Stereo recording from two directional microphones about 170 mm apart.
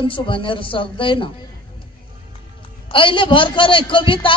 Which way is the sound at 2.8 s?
30° left (ahead or behind).